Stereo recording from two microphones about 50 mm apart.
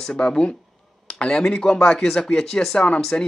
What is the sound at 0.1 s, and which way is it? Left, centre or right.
Speech, left.